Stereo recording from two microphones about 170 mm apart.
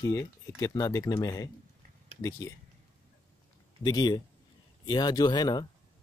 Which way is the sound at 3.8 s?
20° left (ahead or behind).